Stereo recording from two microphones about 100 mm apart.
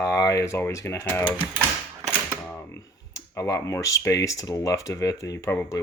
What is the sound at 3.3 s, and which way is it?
Speech, 30° left (ahead or behind).